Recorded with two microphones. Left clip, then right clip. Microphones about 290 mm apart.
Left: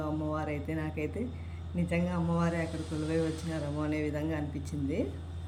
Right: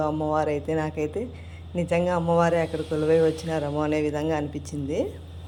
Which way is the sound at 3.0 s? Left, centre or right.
Right.